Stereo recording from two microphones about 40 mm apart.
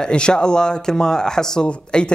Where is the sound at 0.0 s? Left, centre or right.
Left.